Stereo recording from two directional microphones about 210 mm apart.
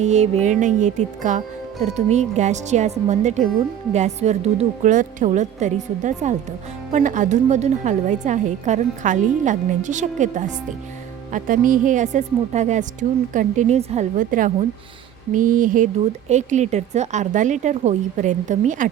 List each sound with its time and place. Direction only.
0.0 s a woman's voice: 30° right (ahead or behind)